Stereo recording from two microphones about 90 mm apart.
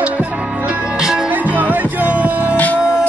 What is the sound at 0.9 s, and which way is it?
Music, 10° right (ahead or behind).